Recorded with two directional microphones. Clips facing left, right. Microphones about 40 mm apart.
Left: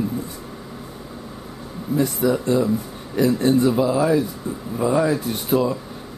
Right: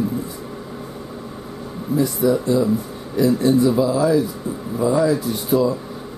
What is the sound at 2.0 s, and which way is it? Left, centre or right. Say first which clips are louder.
A man's voice: right 2 dB; left.